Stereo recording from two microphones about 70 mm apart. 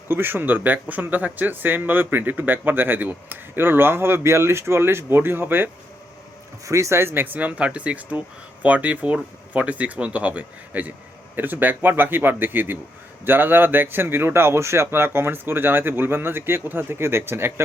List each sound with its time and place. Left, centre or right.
0.1 s speech: right
6.7 s speech: right